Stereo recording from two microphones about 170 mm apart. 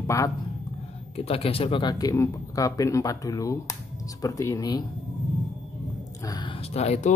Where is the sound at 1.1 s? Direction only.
35° left (ahead or behind).